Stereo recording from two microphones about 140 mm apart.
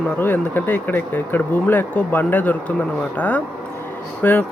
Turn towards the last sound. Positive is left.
turn(degrees=10)  # may be behind; listen again after turning